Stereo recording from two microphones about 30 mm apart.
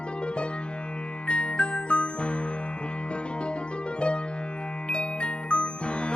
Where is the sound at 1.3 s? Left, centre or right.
Left.